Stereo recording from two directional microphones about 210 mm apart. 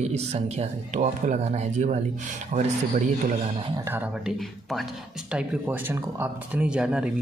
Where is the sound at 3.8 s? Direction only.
10° right (ahead or behind).